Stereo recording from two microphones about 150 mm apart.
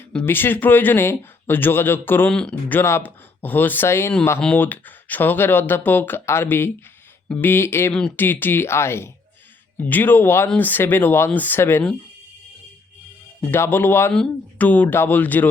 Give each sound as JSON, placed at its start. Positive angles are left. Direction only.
{"t": 0.0, "sound": "speech", "side_deg": 10}
{"t": 13.4, "sound": "speech", "side_deg": 15}